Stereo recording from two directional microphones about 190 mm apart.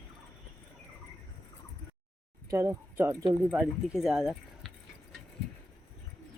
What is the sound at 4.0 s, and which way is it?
Speech, centre (ahead or behind).